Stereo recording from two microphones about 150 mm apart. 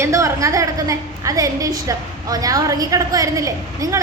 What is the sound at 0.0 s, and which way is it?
A woman's voice, 20° right (ahead or behind).